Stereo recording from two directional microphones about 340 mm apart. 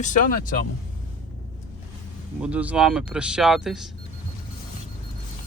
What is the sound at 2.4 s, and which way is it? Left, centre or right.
Speech, centre.